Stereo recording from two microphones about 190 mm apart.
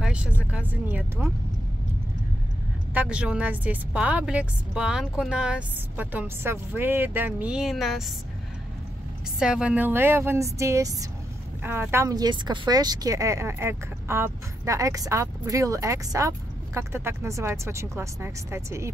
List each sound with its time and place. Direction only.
0.0 s speech: 5° right (ahead or behind)
2.9 s speech: 5° right (ahead or behind)
9.4 s speech: 5° right (ahead or behind)